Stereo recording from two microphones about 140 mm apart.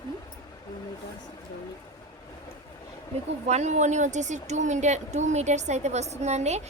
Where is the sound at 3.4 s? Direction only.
55° right (ahead or behind).